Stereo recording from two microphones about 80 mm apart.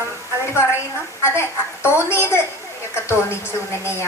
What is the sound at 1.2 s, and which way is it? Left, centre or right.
A woman's voice, left.